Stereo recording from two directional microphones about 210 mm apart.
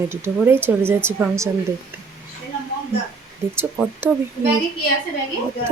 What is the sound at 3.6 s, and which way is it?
Speech, 10° right (ahead or behind).